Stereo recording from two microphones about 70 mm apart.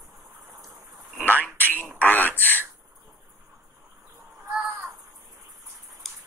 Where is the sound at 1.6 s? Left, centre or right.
Left.